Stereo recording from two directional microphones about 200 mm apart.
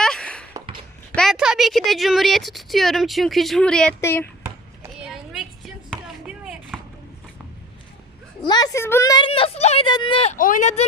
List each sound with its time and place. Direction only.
0.0 s a sound: 5° left (ahead or behind)
1.1 s a woman's voice: centre (ahead or behind)
4.4 s chopping: 5° right (ahead or behind)
8.4 s a woman's voice: 20° left (ahead or behind)
10.3 s speech: 40° left (ahead or behind)